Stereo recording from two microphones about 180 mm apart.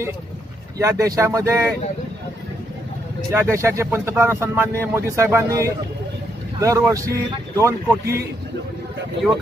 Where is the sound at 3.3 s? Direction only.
15° right (ahead or behind).